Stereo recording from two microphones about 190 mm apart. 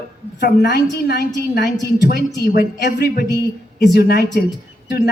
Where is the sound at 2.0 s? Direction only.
60° left (ahead or behind).